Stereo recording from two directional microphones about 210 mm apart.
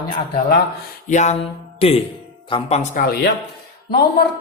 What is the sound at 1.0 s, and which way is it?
Speech, 35° left (ahead or behind).